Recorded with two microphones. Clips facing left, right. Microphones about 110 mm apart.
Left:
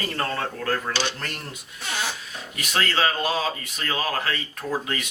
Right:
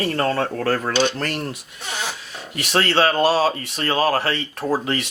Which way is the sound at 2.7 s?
30° right (ahead or behind).